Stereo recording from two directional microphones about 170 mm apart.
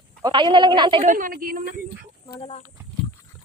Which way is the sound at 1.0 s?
50° right (ahead or behind).